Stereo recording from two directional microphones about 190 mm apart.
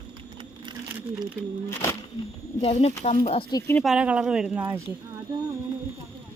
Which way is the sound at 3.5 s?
15° left (ahead or behind).